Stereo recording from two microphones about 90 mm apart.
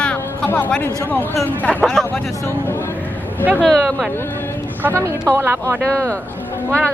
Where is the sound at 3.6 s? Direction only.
Centre (ahead or behind).